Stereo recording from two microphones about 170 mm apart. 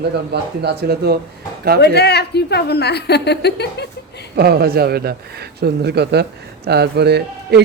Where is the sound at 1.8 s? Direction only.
75° left (ahead or behind).